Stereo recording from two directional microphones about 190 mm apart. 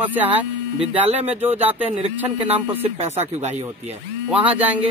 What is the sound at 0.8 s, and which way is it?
Speech, 35° right (ahead or behind).